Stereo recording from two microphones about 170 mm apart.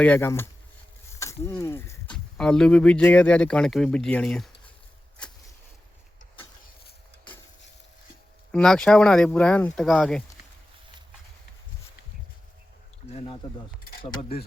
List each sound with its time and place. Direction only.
0.0 s speech: 10° left (ahead or behind)
1.2 s a sound: 15° left (ahead or behind)
2.1 s speech: 5° left (ahead or behind)
8.5 s speech: 5° left (ahead or behind)
13.1 s speech: 30° left (ahead or behind)